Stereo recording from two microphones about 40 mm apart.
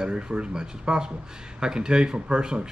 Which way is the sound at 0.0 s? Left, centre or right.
Right.